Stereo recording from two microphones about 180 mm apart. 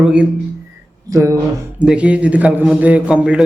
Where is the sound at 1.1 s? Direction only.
20° right (ahead or behind).